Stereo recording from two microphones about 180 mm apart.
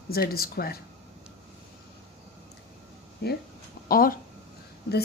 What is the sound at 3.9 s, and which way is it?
Speech, 50° left (ahead or behind).